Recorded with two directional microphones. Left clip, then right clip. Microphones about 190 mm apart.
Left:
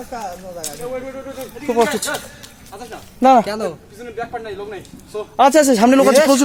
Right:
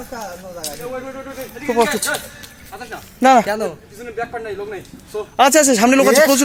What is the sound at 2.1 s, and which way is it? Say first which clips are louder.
Speech: right 2 dB; centre (ahead or behind).